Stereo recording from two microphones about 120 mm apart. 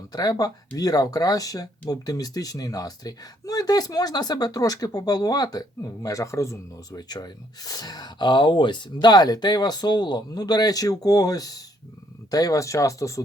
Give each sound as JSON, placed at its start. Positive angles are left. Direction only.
{"t": 0.1, "sound": "speech", "side_deg": 30}